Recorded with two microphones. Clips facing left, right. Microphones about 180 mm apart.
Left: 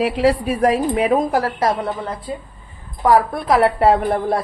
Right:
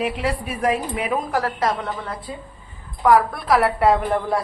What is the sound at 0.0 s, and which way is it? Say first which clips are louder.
Speech: left 7 dB; 35° left (ahead or behind).